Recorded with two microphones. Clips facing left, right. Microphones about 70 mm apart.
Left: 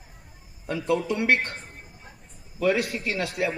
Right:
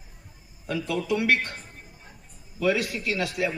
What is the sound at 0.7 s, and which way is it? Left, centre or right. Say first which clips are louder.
Speech: left 1 dB; left.